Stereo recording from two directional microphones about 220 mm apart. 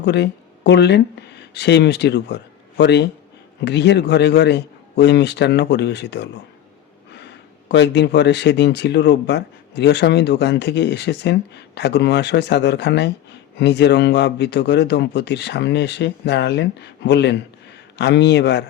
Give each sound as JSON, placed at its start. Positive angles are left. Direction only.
{"t": 0.0, "sound": "speech", "side_deg": 50}